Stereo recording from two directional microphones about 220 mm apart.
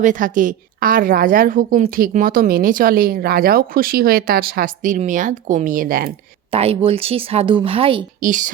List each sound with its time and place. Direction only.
0.0 s a woman's voice: 35° right (ahead or behind)
6.5 s speech: 25° right (ahead or behind)
8.2 s a woman's voice: 35° right (ahead or behind)